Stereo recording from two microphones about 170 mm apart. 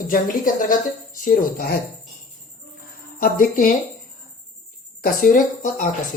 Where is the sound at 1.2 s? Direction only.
55° left (ahead or behind).